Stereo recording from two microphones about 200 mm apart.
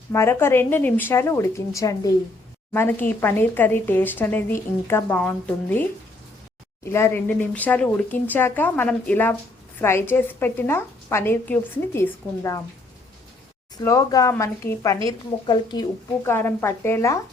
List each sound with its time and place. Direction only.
0.1 s a woman's voice: 10° left (ahead or behind)
6.8 s a woman's voice: 10° left (ahead or behind)
13.8 s a woman's voice: 15° left (ahead or behind)